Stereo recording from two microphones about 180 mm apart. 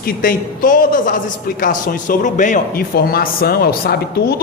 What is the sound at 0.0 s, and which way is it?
A man's voice, 50° left (ahead or behind).